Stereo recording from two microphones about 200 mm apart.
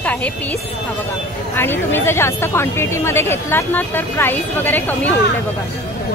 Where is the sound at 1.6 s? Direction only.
10° left (ahead or behind).